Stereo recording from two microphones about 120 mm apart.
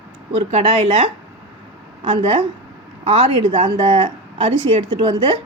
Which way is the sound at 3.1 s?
55° right (ahead or behind).